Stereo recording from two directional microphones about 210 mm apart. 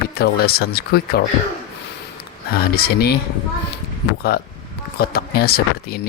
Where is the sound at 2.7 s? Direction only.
45° left (ahead or behind).